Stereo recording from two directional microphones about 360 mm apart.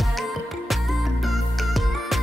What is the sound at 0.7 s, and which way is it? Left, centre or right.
Music, centre.